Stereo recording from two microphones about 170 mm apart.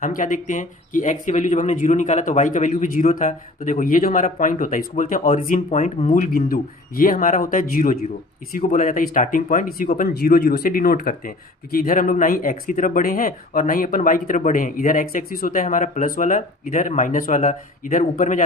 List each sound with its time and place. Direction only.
0.0 s speech: 50° left (ahead or behind)